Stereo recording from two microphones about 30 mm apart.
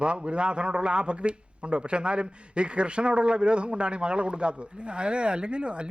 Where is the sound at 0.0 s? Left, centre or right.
Right.